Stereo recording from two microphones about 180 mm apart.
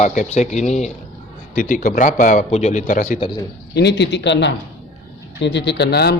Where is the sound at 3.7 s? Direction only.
70° left (ahead or behind).